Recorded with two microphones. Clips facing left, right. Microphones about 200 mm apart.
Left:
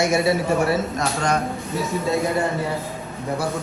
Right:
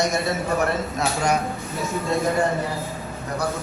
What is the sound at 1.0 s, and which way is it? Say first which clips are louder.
Speech: even; 10° right (ahead or behind).